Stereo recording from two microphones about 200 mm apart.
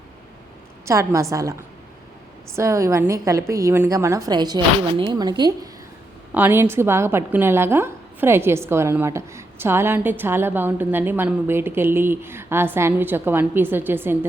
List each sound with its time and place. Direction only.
0.9 s a woman's voice: 15° right (ahead or behind)
2.6 s a woman's voice: 15° right (ahead or behind)
6.3 s a woman's voice: 10° right (ahead or behind)